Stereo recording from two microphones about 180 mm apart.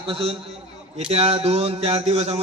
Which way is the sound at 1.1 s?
35° right (ahead or behind).